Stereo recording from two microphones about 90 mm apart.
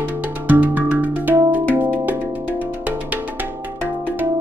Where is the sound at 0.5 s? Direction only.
20° right (ahead or behind).